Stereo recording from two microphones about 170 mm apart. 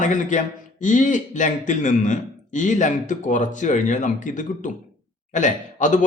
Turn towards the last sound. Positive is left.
turn(degrees=45)  # may be behind; listen again after turning